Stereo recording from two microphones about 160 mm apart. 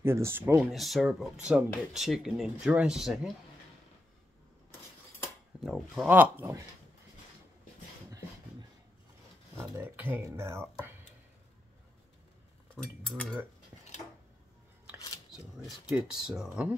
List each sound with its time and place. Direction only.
0.0 s speech: 15° right (ahead or behind)
0.7 s speech: centre (ahead or behind)
5.6 s speech: centre (ahead or behind)
6.0 s speech: 10° right (ahead or behind)
9.6 s speech: 15° right (ahead or behind)
12.7 s cutlery: centre (ahead or behind)
15.3 s speech: 5° right (ahead or behind)